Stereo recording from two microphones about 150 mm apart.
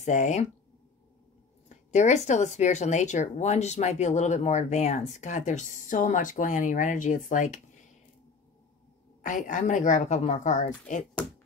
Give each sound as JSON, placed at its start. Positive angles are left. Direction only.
{"t": 0.0, "sound": "speech", "side_deg": 50}
{"t": 1.7, "sound": "speech", "side_deg": 50}
{"t": 9.2, "sound": "a woman's voice", "side_deg": 60}